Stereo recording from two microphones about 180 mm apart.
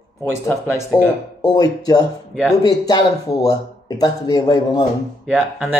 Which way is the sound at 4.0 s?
20° left (ahead or behind).